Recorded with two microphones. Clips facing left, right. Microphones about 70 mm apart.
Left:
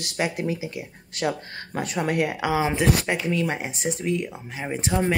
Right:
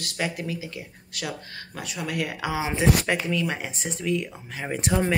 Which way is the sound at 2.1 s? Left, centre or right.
Left.